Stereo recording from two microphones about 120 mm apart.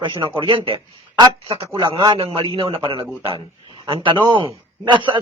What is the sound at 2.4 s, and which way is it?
A man's voice, 40° right (ahead or behind).